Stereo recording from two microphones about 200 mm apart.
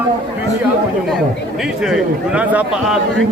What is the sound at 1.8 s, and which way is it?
A man's voice, 5° right (ahead or behind).